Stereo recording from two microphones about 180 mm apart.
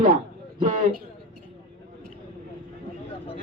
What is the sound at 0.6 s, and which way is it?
Speech, 50° right (ahead or behind).